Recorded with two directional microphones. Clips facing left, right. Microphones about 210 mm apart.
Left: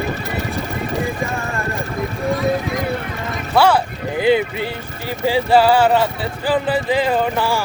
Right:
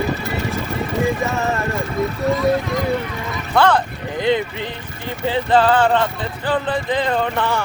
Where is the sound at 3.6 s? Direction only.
10° left (ahead or behind).